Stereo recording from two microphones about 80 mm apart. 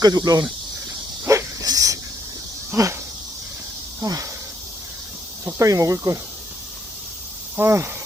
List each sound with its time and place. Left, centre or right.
0.0 s speech: right
1.2 s dog: right
1.6 s speech: right
4.0 s speech: right
5.5 s speech: right
7.5 s speech: right